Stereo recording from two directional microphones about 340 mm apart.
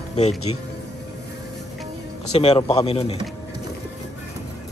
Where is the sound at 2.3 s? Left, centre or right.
Centre.